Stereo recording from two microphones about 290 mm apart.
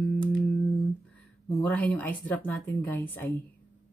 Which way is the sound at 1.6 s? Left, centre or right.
Centre.